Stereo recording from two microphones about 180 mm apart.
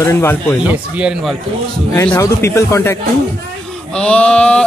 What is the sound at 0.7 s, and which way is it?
Speech, 5° right (ahead or behind).